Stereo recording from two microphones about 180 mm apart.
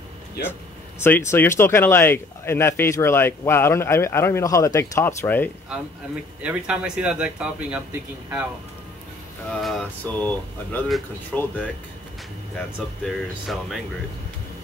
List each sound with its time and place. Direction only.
0.4 s speech: 60° left (ahead or behind)
1.0 s speech: 15° left (ahead or behind)
6.4 s speech: 5° right (ahead or behind)
9.6 s speech: centre (ahead or behind)